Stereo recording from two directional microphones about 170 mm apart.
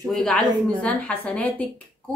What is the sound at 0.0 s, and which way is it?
A woman's voice, 5° left (ahead or behind).